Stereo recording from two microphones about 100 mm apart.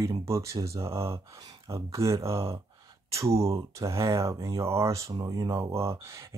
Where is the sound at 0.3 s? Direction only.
30° right (ahead or behind).